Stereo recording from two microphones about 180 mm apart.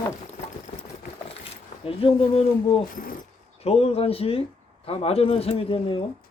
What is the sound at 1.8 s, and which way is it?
Speech, 30° left (ahead or behind).